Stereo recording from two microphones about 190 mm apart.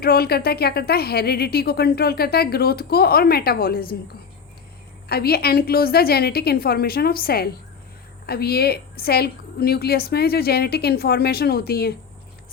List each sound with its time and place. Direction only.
0.0 s speech: 55° left (ahead or behind)